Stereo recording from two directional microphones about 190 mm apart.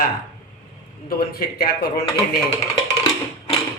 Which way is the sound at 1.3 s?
55° left (ahead or behind).